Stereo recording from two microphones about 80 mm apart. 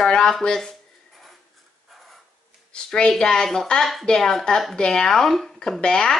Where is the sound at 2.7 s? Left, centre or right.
Centre.